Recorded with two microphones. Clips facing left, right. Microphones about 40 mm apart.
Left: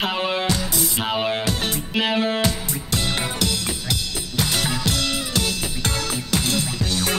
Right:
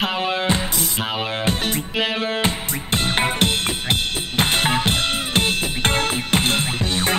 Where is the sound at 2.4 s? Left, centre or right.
Right.